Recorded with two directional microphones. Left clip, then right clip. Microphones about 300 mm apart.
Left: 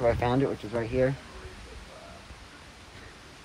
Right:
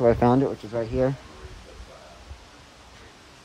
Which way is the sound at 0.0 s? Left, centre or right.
Right.